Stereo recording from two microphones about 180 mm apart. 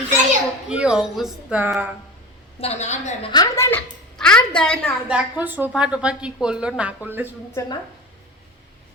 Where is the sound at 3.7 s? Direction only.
5° left (ahead or behind).